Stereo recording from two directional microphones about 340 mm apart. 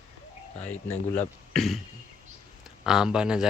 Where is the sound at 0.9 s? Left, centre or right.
Centre.